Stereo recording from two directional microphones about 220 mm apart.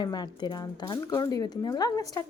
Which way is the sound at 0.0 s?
20° left (ahead or behind).